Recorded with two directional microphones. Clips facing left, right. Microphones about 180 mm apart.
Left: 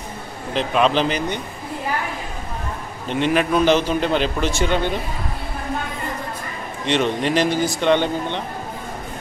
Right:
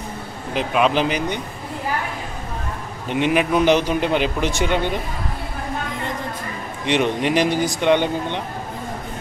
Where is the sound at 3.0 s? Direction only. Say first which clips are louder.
Even; 15° right (ahead or behind).